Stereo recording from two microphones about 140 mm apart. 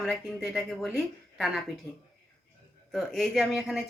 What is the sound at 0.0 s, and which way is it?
A man's voice, 5° left (ahead or behind).